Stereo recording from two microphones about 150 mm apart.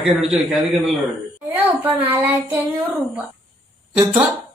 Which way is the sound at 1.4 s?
20° right (ahead or behind).